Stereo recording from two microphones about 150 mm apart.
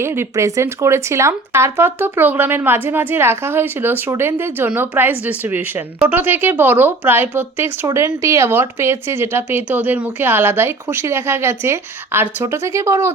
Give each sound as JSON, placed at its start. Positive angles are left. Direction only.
{"t": 0.0, "sound": "speech", "side_deg": -15}